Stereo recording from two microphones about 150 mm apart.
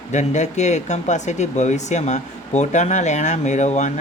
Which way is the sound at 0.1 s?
50° left (ahead or behind).